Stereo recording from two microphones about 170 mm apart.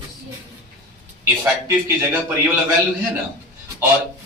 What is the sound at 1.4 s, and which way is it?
Speech, 15° right (ahead or behind).